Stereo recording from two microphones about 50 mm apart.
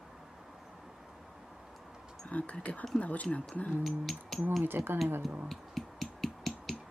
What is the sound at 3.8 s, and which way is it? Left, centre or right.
Music, centre.